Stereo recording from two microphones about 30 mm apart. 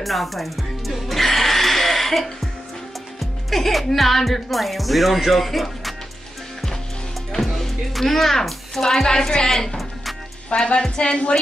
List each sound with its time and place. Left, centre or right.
0.0 s speech: centre
1.1 s music: centre
3.2 s speech: centre
7.3 s music: centre
8.0 s speech: centre
9.3 s a woman's voice: left
10.5 s music: left